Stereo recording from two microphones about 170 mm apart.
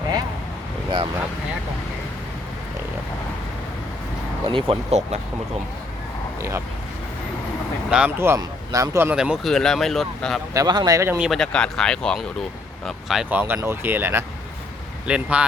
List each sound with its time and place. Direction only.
4.4 s speech: 30° right (ahead or behind)
7.9 s speech: 5° right (ahead or behind)
9.1 s speech: 5° right (ahead or behind)
10.5 s speech: 25° right (ahead or behind)
11.3 s speech: 5° left (ahead or behind)
13.4 s speech: 15° right (ahead or behind)